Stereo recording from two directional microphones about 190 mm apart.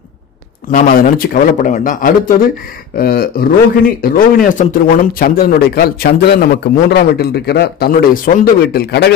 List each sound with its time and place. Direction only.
0.7 s speech: 45° left (ahead or behind)